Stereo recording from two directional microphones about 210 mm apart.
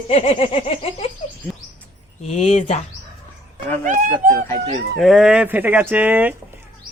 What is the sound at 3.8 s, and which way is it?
Speech, 40° right (ahead or behind).